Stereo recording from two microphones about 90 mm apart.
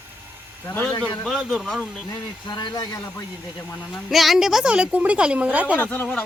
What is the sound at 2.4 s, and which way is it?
Speech, 55° left (ahead or behind).